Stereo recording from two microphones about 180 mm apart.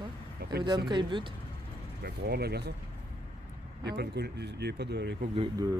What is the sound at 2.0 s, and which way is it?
Speech, 65° right (ahead or behind).